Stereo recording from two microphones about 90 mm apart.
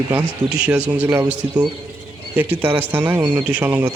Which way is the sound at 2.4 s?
20° right (ahead or behind).